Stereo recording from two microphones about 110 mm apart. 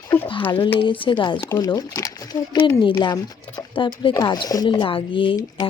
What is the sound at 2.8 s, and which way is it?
Speech, 45° left (ahead or behind).